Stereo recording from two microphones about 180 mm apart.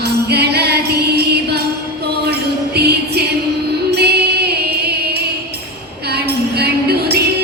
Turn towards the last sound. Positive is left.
turn(degrees=-65)  # may be behind; listen again after turning